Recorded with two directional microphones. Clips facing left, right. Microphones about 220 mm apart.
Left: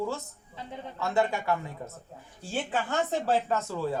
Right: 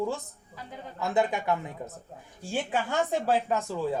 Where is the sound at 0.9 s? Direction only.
20° right (ahead or behind).